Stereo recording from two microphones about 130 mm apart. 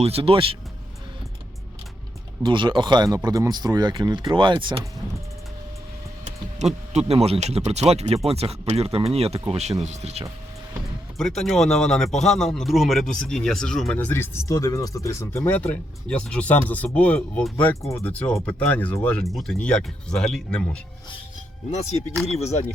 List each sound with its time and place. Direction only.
0.0 s speech: 50° right (ahead or behind)
2.4 s speech: 35° right (ahead or behind)
6.9 s speech: 50° right (ahead or behind)
11.2 s speech: 5° left (ahead or behind)
13.9 s speech: 15° left (ahead or behind)
21.7 s speech: 55° left (ahead or behind)